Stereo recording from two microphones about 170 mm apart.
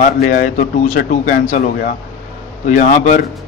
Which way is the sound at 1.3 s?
60° left (ahead or behind).